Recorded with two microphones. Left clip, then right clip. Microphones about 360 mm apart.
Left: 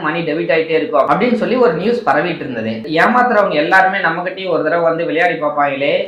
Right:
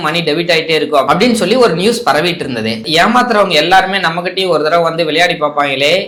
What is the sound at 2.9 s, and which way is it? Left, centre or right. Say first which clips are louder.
Speech: right 2 dB; right.